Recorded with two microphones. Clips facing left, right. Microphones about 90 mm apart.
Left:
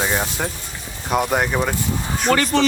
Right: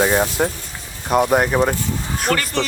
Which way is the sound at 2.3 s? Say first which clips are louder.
Left 3 dB; 10° left (ahead or behind).